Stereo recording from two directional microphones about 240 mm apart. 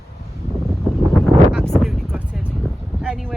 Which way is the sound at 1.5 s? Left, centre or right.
Centre.